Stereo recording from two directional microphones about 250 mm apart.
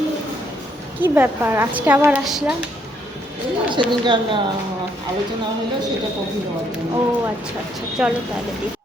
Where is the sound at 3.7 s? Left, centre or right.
Centre.